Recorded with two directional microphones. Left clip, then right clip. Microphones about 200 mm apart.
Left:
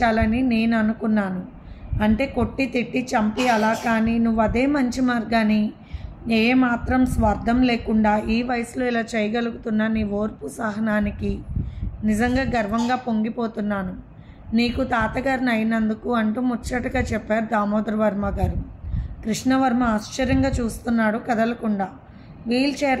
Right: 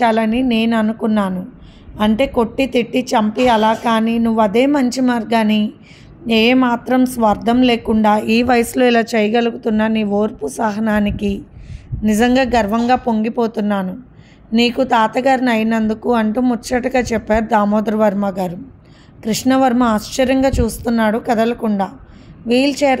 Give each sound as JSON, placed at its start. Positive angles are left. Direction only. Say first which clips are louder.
{"t": 0.0, "sound": "a woman's voice", "louder": "right 5 dB", "side_deg": -45}